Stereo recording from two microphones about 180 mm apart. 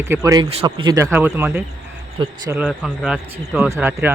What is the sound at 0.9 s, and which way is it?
Speech, 10° right (ahead or behind).